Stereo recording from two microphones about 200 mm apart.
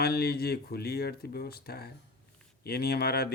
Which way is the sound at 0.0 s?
50° left (ahead or behind).